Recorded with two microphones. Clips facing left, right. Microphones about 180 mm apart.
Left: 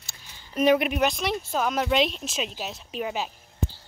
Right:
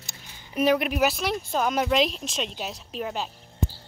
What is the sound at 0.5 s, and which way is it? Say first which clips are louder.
Speech: left 1 dB; centre (ahead or behind).